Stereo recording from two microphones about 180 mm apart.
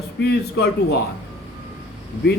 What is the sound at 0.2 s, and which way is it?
Speech, 65° left (ahead or behind).